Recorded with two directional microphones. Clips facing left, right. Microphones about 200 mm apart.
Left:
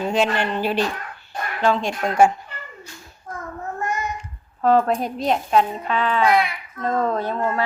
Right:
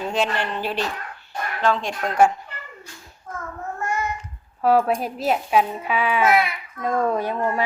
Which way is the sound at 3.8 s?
20° left (ahead or behind).